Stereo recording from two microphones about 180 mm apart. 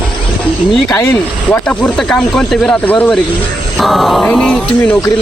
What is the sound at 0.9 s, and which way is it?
Speech, 10° left (ahead or behind).